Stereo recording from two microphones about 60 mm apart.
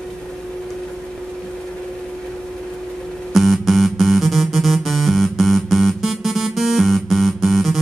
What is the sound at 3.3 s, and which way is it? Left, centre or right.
Music, centre.